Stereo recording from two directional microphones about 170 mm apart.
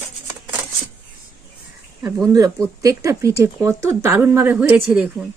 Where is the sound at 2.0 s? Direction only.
20° right (ahead or behind).